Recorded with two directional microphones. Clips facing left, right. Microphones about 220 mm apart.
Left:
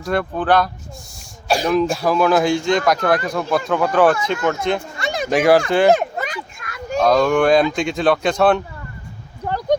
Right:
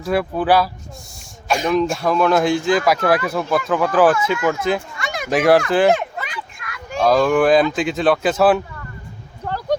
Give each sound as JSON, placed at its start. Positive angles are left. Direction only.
{"t": 0.0, "sound": "speech", "side_deg": -5}
{"t": 4.9, "sound": "a sound", "side_deg": 30}
{"t": 5.3, "sound": "speech", "side_deg": 0}
{"t": 5.9, "sound": "children playing", "side_deg": 40}
{"t": 7.0, "sound": "speech", "side_deg": 0}
{"t": 9.5, "sound": "a sound", "side_deg": 15}